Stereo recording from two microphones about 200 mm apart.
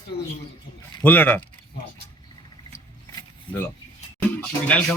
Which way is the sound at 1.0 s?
10° left (ahead or behind).